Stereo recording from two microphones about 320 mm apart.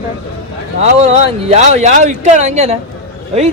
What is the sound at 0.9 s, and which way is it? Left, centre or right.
Speech, centre.